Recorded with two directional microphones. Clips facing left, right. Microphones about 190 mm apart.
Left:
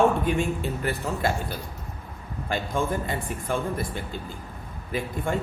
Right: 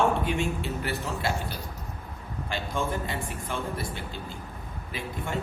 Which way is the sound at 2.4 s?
50° left (ahead or behind).